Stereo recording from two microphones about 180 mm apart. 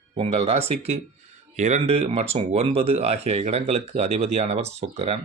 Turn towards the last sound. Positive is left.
turn(degrees=-35)  # may be behind; listen again after turning